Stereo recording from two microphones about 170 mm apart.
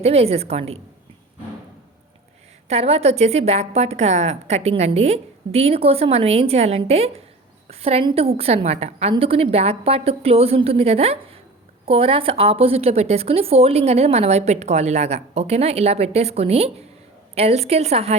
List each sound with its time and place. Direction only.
0.0 s a woman's voice: 35° right (ahead or behind)
2.6 s a woman's voice: 35° right (ahead or behind)